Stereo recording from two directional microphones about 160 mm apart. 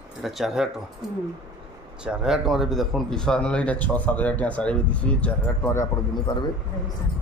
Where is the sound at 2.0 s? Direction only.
5° right (ahead or behind).